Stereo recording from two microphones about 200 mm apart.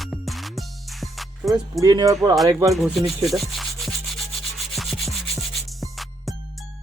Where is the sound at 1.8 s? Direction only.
20° right (ahead or behind).